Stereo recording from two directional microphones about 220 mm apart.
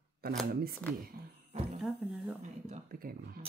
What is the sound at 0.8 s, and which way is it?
Speech, 5° left (ahead or behind).